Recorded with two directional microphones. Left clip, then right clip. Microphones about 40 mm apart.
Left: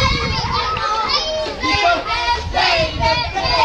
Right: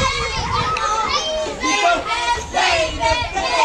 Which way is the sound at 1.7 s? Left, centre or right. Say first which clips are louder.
Left 1 dB; right.